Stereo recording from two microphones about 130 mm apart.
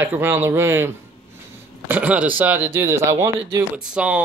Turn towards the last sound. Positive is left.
turn(degrees=-10)  # may be behind; listen again after turning